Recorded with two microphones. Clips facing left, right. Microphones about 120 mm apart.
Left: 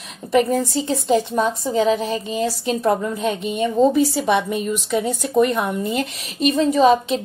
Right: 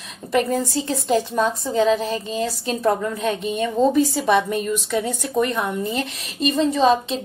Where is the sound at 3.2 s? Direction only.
25° left (ahead or behind).